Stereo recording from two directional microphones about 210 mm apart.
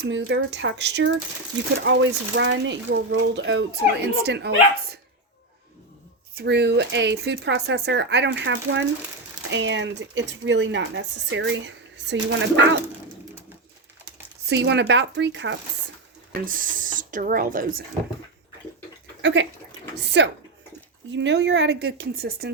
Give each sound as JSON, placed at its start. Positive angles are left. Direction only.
{"t": 0.0, "sound": "speech", "side_deg": -55}
{"t": 6.3, "sound": "speech", "side_deg": -55}
{"t": 14.4, "sound": "speech", "side_deg": -55}
{"t": 16.3, "sound": "speech", "side_deg": -40}
{"t": 19.2, "sound": "speech", "side_deg": -55}